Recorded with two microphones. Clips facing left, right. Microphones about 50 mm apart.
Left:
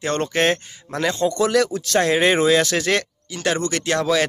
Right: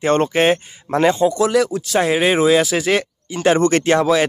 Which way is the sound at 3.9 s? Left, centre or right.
Centre.